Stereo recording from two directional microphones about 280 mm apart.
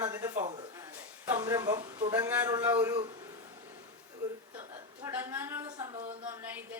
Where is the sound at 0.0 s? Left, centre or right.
Centre.